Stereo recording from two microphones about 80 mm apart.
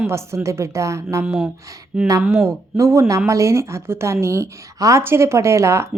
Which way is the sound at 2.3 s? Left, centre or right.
Right.